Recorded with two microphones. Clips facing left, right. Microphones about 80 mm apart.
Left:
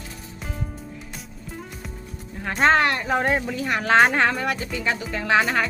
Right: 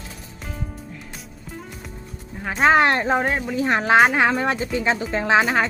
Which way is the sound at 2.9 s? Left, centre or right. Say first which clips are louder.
Right 3 dB; right.